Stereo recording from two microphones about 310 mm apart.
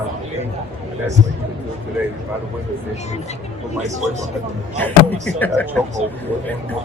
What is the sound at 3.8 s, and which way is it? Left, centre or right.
Speech, right.